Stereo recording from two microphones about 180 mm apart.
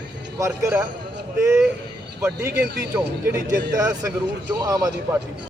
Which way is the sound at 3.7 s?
20° right (ahead or behind).